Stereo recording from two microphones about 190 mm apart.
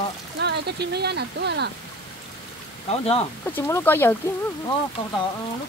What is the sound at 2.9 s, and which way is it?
Speech, 30° left (ahead or behind).